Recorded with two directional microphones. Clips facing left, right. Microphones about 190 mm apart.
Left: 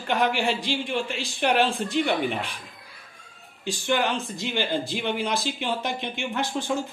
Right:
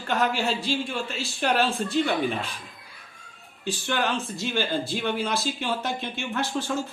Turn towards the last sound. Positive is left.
turn(degrees=15)  # may be behind; listen again after turning